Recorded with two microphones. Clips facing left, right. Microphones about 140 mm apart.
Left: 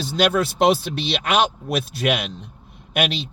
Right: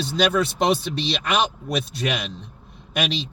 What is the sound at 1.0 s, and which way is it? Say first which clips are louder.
Speech: left 3 dB; 60° left (ahead or behind).